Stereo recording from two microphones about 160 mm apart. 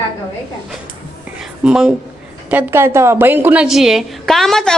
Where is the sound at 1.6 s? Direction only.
5° right (ahead or behind).